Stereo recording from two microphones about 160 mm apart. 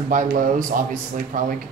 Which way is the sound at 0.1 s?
55° right (ahead or behind).